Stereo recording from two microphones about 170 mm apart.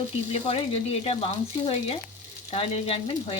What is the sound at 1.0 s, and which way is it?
Frying, 35° left (ahead or behind).